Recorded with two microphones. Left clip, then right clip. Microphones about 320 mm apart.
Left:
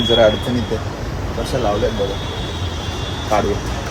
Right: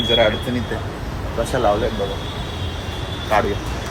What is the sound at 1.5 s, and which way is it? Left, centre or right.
Speech, centre.